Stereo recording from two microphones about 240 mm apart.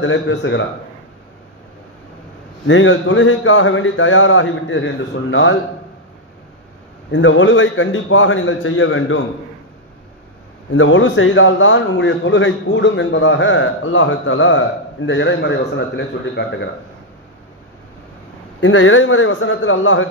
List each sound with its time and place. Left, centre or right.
0.0 s a man's voice: left
2.6 s a man's voice: left
7.1 s a man's voice: left
10.7 s a man's voice: left
18.6 s a man's voice: left